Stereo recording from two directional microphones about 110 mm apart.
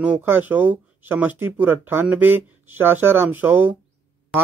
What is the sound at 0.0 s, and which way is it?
Speech, 15° right (ahead or behind).